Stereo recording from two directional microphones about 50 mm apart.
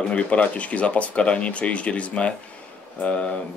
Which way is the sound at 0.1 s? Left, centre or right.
Left.